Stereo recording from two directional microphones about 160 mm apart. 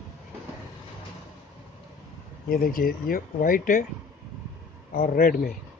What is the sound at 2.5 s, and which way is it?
Speech, 65° left (ahead or behind).